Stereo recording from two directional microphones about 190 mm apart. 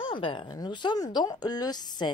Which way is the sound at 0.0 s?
25° left (ahead or behind).